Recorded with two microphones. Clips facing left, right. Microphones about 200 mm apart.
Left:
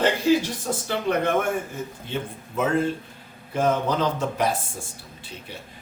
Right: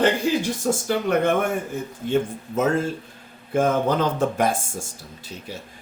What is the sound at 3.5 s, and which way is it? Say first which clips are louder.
A man's voice: right 3 dB; 50° right (ahead or behind).